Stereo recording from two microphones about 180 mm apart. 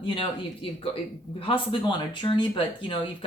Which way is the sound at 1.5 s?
30° left (ahead or behind).